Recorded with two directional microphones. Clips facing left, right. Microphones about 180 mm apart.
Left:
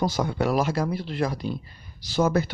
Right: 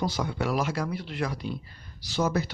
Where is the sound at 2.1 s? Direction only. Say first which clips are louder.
Left 4 dB; 55° left (ahead or behind).